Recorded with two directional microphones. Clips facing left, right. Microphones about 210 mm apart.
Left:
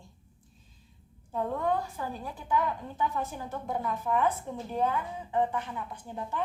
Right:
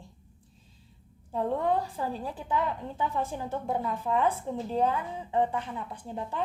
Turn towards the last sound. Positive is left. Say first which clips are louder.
# right 1 dB
turn(degrees=-30)  # may be behind; listen again after turning